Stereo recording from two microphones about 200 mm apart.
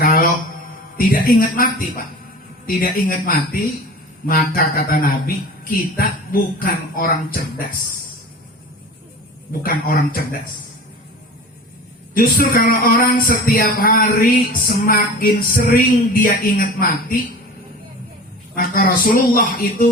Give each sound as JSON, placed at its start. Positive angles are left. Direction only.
{"t": 0.0, "sound": "a sound", "side_deg": 45}
{"t": 0.9, "sound": "speech", "side_deg": 45}
{"t": 2.6, "sound": "speech", "side_deg": 45}
{"t": 9.5, "sound": "speech", "side_deg": 45}
{"t": 12.1, "sound": "speech", "side_deg": 45}
{"t": 18.5, "sound": "speech", "side_deg": 45}